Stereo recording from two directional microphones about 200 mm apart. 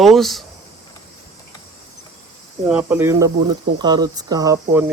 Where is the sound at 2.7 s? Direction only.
5° right (ahead or behind).